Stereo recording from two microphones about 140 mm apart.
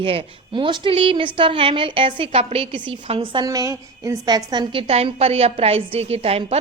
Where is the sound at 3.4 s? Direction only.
25° right (ahead or behind).